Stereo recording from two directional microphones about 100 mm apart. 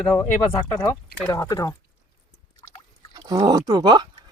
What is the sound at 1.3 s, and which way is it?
Speech, 35° left (ahead or behind).